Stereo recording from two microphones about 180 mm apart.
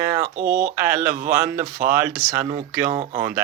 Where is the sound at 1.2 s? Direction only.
10° right (ahead or behind).